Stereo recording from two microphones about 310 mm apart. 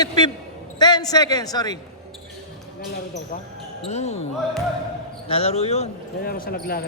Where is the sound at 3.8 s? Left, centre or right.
Centre.